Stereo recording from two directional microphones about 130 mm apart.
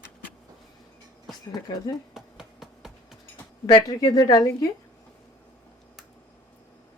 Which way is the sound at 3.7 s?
35° left (ahead or behind).